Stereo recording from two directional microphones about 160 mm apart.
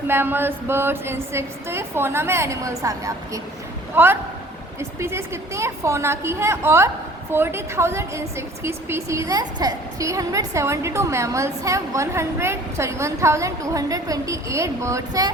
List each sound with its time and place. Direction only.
0.1 s a woman's voice: 15° right (ahead or behind)